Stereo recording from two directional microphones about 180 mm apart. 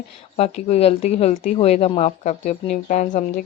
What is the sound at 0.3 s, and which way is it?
A woman's voice, 35° left (ahead or behind).